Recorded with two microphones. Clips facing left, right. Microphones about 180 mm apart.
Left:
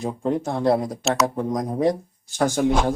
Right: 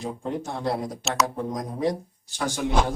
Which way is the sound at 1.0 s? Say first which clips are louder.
Left 3 dB; centre (ahead or behind).